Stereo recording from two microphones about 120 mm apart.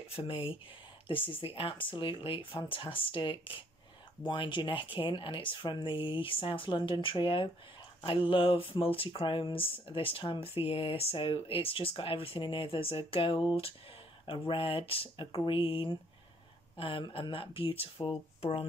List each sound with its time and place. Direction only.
0.1 s speech: 50° left (ahead or behind)